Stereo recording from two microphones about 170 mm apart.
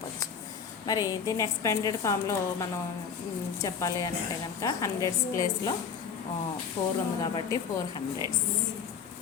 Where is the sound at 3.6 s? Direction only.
20° left (ahead or behind).